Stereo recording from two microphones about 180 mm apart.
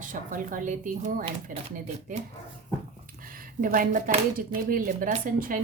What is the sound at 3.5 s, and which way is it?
Speech, 50° right (ahead or behind).